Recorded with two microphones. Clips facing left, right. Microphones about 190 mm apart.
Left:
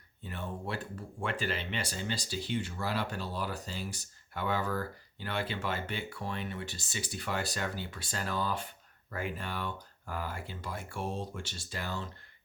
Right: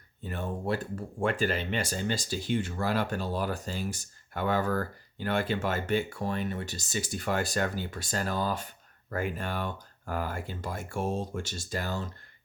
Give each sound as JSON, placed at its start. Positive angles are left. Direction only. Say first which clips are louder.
{"t": 0.2, "sound": "speech", "louder": "right 5 dB", "side_deg": -45}